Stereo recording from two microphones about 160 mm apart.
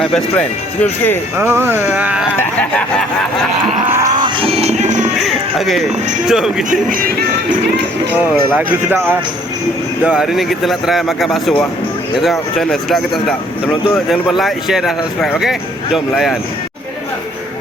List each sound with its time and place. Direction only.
0.0 s speech: 5° left (ahead or behind)
1.4 s speech: 15° right (ahead or behind)
2.3 s speech: 10° left (ahead or behind)
3.8 s livestock: 15° right (ahead or behind)
4.2 s music: 35° right (ahead or behind)
5.1 s a sound: centre (ahead or behind)
6.2 s speech: 5° right (ahead or behind)
6.7 s music: 60° right (ahead or behind)
8.5 s speech: 10° right (ahead or behind)